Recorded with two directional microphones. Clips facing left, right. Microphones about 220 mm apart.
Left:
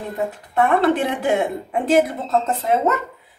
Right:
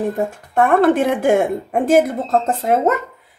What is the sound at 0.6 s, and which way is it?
Speech, 50° right (ahead or behind).